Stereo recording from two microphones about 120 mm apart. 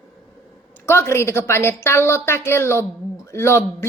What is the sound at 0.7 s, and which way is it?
A woman's voice, 20° left (ahead or behind).